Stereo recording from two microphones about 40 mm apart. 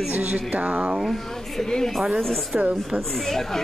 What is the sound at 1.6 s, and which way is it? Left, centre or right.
Speech, centre.